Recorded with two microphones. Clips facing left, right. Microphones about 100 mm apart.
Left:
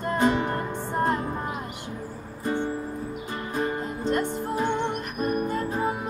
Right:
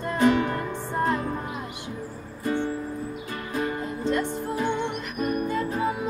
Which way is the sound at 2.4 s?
20° left (ahead or behind).